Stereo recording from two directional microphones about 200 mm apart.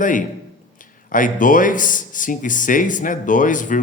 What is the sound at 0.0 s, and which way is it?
Speech, 40° left (ahead or behind).